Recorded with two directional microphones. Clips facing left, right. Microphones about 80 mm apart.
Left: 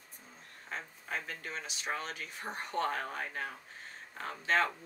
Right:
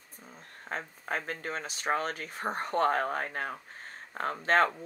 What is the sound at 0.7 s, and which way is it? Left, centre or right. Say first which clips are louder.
Speech: right 6 dB; right.